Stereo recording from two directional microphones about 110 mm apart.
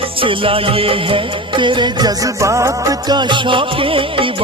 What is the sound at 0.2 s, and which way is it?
Music, 55° right (ahead or behind).